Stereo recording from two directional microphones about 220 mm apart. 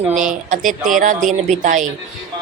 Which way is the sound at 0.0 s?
35° right (ahead or behind).